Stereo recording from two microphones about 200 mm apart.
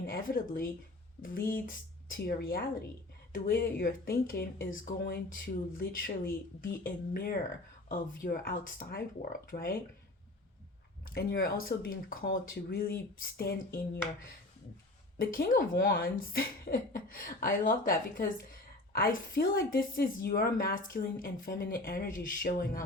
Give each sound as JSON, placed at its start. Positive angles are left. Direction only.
{"t": 0.1, "sound": "speech", "side_deg": 45}
{"t": 1.4, "sound": "speech", "side_deg": 10}
{"t": 2.1, "sound": "speech", "side_deg": 50}
{"t": 11.1, "sound": "speech", "side_deg": 50}
{"t": 15.2, "sound": "speech", "side_deg": 45}